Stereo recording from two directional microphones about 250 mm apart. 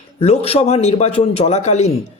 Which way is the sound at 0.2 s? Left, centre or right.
Left.